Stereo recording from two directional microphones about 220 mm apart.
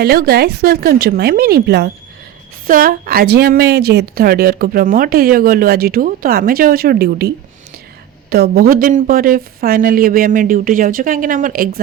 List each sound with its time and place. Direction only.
0.0 s a woman's voice: 45° right (ahead or behind)